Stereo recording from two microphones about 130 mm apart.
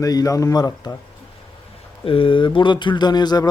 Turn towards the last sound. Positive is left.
turn(degrees=35)  # may be behind; listen again after turning